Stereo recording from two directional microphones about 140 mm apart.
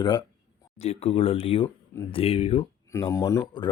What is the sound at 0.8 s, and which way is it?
Speech, 45° left (ahead or behind).